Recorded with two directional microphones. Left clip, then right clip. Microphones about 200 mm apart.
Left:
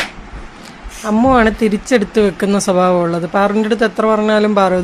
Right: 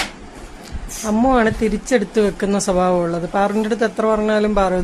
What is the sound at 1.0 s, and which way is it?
Speech, 10° left (ahead or behind).